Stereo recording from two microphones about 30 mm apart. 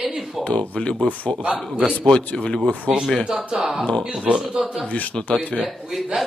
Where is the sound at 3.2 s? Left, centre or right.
Right.